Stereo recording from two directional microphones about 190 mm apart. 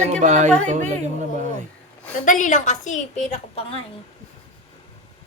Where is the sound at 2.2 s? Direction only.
40° left (ahead or behind).